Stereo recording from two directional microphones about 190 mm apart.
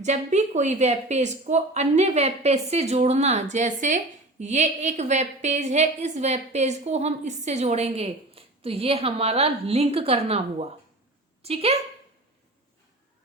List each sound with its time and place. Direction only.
0.0 s a woman's voice: 40° right (ahead or behind)